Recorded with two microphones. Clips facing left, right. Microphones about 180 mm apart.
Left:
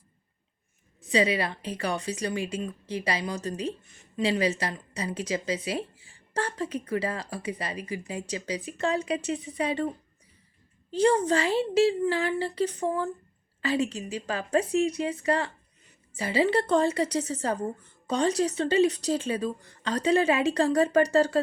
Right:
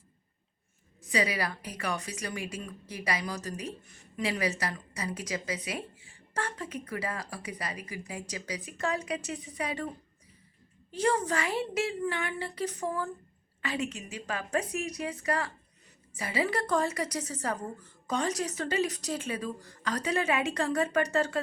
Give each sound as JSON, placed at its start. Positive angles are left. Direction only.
{"t": 1.0, "sound": "a woman's voice", "side_deg": 25}
{"t": 10.9, "sound": "a woman's voice", "side_deg": 30}